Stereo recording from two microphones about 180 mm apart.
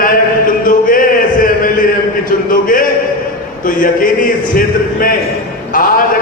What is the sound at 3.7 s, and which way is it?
Speech, 50° left (ahead or behind).